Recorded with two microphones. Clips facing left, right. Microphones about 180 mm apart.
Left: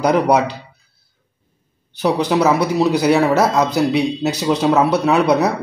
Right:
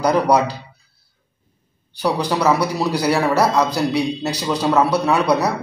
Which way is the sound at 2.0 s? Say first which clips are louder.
Left 4 dB; 20° left (ahead or behind).